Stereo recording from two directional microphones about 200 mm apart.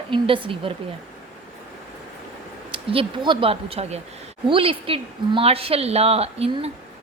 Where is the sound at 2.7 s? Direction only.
25° right (ahead or behind).